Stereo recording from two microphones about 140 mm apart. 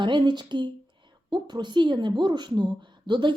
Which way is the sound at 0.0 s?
35° right (ahead or behind).